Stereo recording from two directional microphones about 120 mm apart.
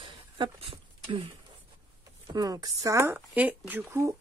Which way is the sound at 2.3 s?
30° right (ahead or behind).